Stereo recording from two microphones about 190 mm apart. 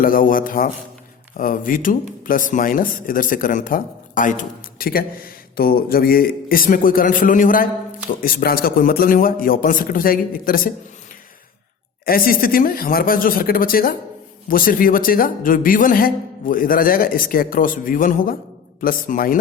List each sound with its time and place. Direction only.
0.0 s speech: 45° left (ahead or behind)
12.0 s speech: 50° left (ahead or behind)